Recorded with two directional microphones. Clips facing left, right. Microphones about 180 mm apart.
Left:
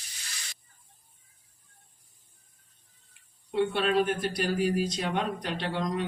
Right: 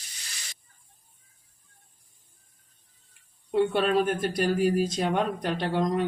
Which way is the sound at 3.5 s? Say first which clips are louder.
Right 3 dB; 45° right (ahead or behind).